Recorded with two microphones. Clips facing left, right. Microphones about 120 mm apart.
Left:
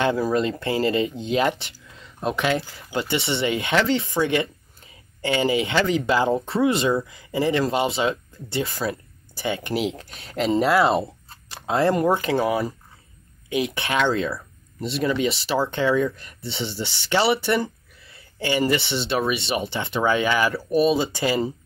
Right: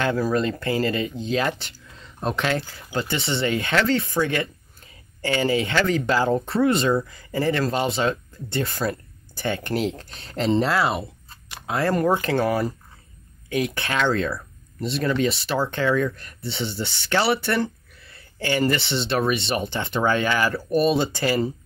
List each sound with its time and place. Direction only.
0.0 s speech: 20° left (ahead or behind)
2.1 s speech: 5° left (ahead or behind)
6.4 s speech: 5° left (ahead or behind)
7.1 s speech: 15° left (ahead or behind)
10.7 s speech: 25° left (ahead or behind)
12.2 s speech: 10° left (ahead or behind)
13.5 s speech: 20° left (ahead or behind)
15.7 s speech: 20° left (ahead or behind)
18.1 s a sound: 15° left (ahead or behind)
18.6 s speech: 5° left (ahead or behind)
21.1 s speech: 20° left (ahead or behind)